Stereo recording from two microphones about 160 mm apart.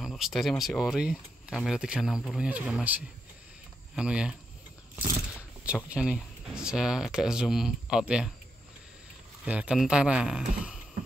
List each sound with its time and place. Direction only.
0.0 s speech: centre (ahead or behind)
5.7 s speech: 5° right (ahead or behind)
9.4 s speech: 5° right (ahead or behind)